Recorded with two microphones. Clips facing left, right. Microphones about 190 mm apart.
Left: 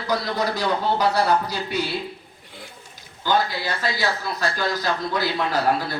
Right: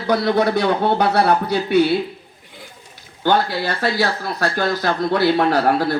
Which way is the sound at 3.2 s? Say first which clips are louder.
Right 4 dB; 60° right (ahead or behind).